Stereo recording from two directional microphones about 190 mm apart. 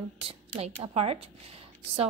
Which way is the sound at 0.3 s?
30° right (ahead or behind).